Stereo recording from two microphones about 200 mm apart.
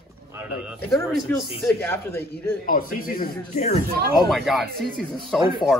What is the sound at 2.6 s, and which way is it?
Speech, 45° left (ahead or behind).